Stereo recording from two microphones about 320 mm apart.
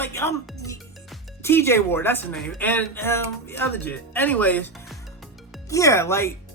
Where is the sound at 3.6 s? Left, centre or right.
Centre.